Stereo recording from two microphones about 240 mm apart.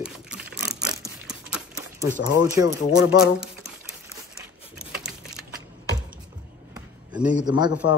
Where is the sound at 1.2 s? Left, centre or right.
Centre.